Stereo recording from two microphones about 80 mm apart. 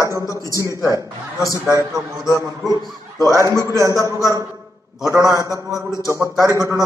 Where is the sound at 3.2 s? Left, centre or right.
Right.